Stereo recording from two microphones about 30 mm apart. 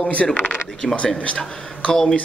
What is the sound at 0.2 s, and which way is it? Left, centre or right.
Speech, left.